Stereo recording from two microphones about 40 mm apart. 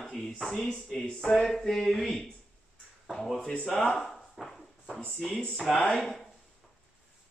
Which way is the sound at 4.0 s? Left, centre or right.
Centre.